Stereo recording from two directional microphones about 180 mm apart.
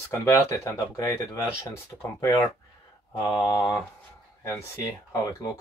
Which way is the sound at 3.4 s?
20° left (ahead or behind).